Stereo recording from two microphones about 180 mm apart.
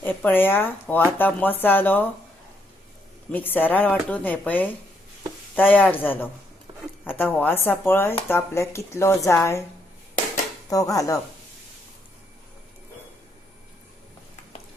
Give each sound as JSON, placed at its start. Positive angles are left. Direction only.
{"t": 0.0, "sound": "speech", "side_deg": 10}
{"t": 3.3, "sound": "speech", "side_deg": 10}
{"t": 10.7, "sound": "speech", "side_deg": 20}